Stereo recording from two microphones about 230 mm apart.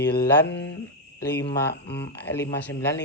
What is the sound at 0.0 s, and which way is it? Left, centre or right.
Mantra, left.